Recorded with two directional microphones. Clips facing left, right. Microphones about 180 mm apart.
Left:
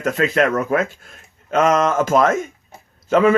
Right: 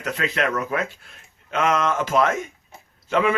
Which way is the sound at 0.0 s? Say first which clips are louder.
Left 7 dB; 45° left (ahead or behind).